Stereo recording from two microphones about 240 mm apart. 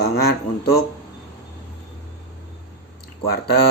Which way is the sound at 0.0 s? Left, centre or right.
Left.